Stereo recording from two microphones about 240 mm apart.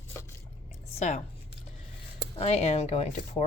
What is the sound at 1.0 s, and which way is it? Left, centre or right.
Speech, left.